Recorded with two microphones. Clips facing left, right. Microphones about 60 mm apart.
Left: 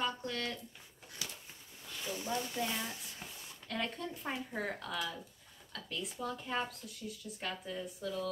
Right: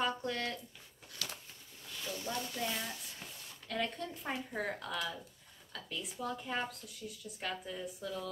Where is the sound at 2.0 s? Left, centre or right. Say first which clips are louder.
Left 2 dB; left.